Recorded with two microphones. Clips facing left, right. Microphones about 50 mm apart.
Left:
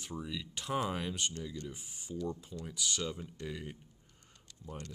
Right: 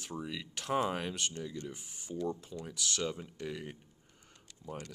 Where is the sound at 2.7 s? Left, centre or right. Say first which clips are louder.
Left 1 dB; centre.